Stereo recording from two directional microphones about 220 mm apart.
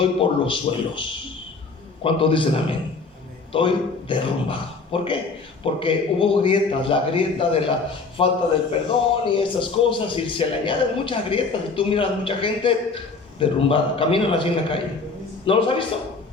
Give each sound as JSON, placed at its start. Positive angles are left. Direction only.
{"t": 0.0, "sound": "a man's voice", "side_deg": 25}
{"t": 2.0, "sound": "a man's voice", "side_deg": 25}